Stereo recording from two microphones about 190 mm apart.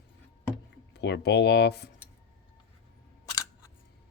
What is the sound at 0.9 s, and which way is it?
Speech, 65° left (ahead or behind).